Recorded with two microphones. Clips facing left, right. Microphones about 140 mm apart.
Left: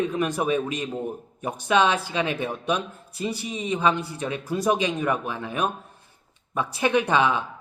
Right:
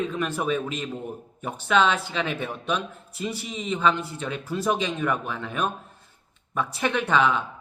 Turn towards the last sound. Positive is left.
turn(degrees=15)  # may be behind; listen again after turning